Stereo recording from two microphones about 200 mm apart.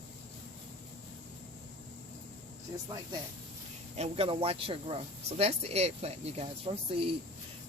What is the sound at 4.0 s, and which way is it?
Speech, 30° right (ahead or behind).